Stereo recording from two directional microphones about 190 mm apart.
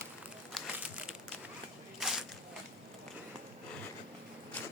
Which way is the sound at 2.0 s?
Centre (ahead or behind).